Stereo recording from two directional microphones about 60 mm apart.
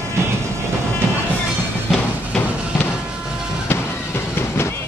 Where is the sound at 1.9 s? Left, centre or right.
Centre.